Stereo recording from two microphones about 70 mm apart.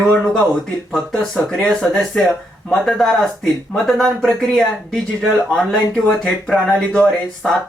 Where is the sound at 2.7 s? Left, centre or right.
Centre.